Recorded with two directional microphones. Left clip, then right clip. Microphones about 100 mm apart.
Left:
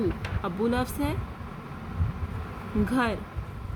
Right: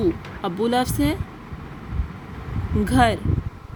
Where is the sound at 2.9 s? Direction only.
65° right (ahead or behind).